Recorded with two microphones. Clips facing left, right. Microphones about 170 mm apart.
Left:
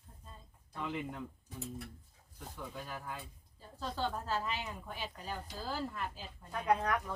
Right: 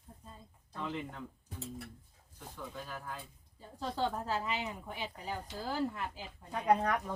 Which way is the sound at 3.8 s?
15° right (ahead or behind).